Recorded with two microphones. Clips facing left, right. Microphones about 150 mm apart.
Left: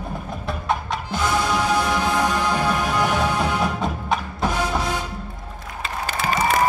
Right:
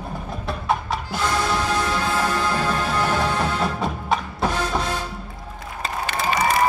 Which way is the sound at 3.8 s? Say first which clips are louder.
Even; centre (ahead or behind).